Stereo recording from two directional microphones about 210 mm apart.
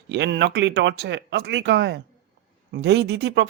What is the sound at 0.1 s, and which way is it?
Speech, 55° right (ahead or behind).